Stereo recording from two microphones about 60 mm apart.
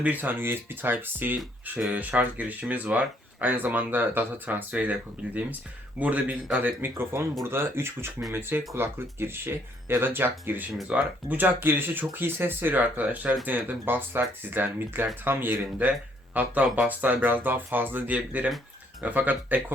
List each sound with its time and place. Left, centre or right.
0.0 s speech: right
6.9 s speech: right
10.8 s speech: right